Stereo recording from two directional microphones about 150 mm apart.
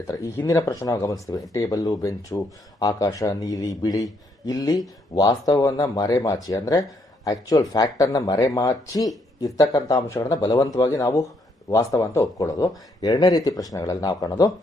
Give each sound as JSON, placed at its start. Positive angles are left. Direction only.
{"t": 0.1, "sound": "speech", "side_deg": 20}